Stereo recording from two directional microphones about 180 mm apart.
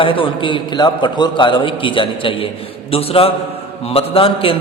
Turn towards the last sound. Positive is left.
turn(degrees=30)  # may be behind; listen again after turning